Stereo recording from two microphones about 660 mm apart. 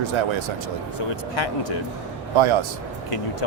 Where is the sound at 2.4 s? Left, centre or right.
Right.